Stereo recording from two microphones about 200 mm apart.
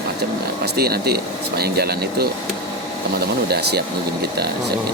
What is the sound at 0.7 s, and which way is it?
Speech, 50° right (ahead or behind).